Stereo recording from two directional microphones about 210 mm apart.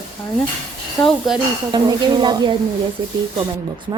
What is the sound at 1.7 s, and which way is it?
Speech, 20° right (ahead or behind).